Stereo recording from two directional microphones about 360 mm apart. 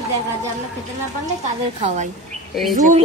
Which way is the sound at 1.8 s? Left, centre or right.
Centre.